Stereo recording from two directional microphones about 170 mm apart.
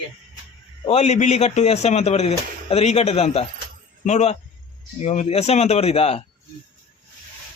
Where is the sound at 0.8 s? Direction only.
35° left (ahead or behind).